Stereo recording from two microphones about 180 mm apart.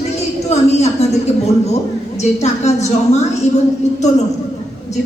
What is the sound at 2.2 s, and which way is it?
Speech, 40° left (ahead or behind).